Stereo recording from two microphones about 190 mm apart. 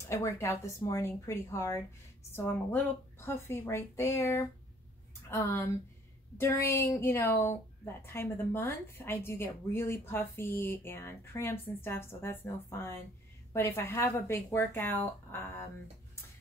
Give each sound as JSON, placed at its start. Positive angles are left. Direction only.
{"t": 0.0, "sound": "a woman's voice", "side_deg": 15}